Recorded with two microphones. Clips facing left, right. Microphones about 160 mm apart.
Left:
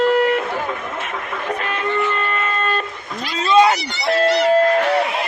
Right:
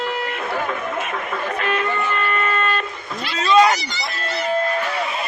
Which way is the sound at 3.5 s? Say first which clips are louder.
Left 1 dB; 25° left (ahead or behind).